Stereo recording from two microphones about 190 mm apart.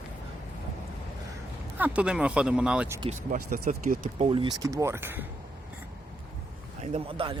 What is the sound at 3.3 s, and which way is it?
Speech, 45° right (ahead or behind).